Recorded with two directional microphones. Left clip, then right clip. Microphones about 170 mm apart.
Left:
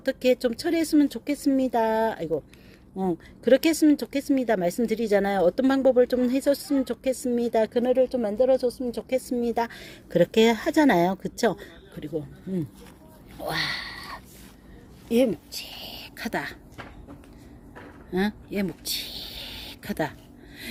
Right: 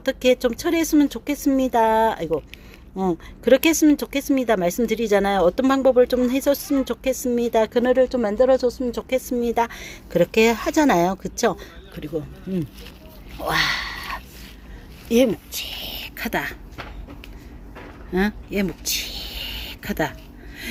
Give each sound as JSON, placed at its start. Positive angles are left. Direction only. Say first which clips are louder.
{"t": 0.0, "sound": "speech", "louder": "right 4 dB", "side_deg": 10}
{"t": 7.7, "sound": "speech", "louder": "right 4 dB", "side_deg": 0}
{"t": 13.4, "sound": "a sound", "louder": "right 7 dB", "side_deg": 0}
{"t": 15.1, "sound": "a woman's voice", "louder": "right 4 dB", "side_deg": 0}
{"t": 18.1, "sound": "speech", "louder": "right 5 dB", "side_deg": 0}